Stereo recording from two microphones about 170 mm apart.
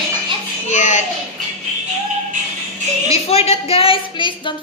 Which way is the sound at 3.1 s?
40° left (ahead or behind).